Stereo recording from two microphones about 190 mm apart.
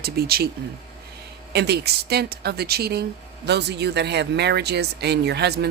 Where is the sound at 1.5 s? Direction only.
60° right (ahead or behind).